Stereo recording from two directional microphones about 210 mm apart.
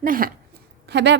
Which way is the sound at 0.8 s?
55° right (ahead or behind).